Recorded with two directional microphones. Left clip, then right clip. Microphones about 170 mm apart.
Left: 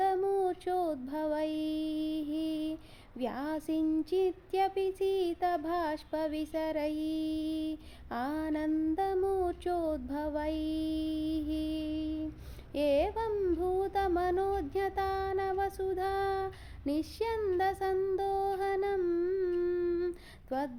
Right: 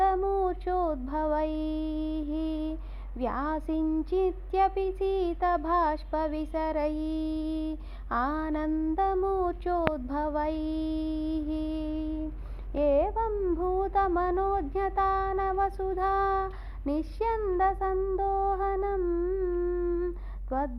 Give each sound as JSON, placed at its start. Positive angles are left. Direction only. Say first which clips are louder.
{"t": 0.0, "sound": "female singing", "louder": "right 4 dB", "side_deg": 10}
{"t": 3.2, "sound": "speech", "louder": "right 5 dB", "side_deg": 5}
{"t": 12.7, "sound": "child singing", "louder": "right 4 dB", "side_deg": 10}
{"t": 18.9, "sound": "humming", "louder": "right 2 dB", "side_deg": 20}